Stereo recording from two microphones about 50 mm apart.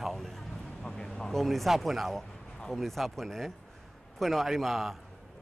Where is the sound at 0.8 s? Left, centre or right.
Centre.